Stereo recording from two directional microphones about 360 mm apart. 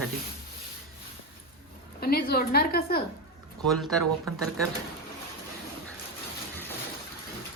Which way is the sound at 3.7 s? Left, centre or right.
Centre.